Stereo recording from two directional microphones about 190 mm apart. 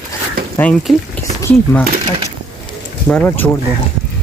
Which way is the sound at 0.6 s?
5° left (ahead or behind).